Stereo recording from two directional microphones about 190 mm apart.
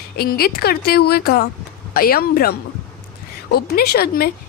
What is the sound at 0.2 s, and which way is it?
A woman's voice, 50° left (ahead or behind).